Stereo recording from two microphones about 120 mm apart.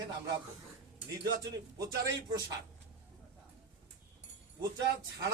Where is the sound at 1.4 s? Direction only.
35° right (ahead or behind).